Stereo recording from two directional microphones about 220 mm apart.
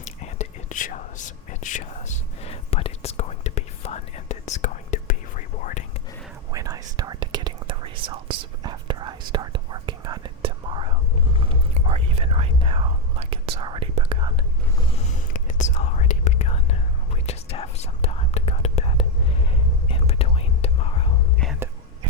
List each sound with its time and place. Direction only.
0.0 s whispering: 30° left (ahead or behind)
6.5 s whispering: 15° right (ahead or behind)
14.9 s whispering: 35° left (ahead or behind)